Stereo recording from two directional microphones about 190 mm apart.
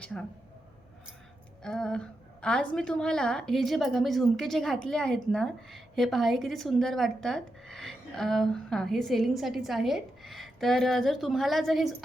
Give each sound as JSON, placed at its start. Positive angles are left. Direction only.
{"t": 0.0, "sound": "a woman's voice", "side_deg": 5}
{"t": 1.6, "sound": "a woman's voice", "side_deg": 5}